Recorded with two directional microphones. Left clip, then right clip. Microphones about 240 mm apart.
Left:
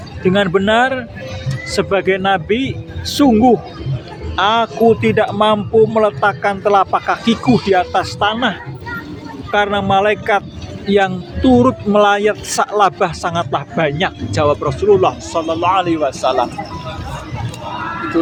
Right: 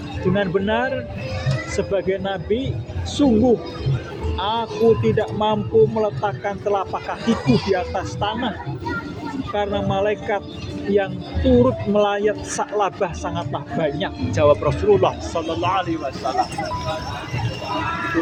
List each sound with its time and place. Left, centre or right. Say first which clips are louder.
0.3 s a man's voice: left 8 dB; left
11.5 s a man's voice: left 4 dB; left